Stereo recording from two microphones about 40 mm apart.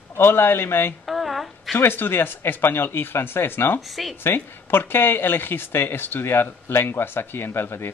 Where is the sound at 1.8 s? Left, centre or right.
Left.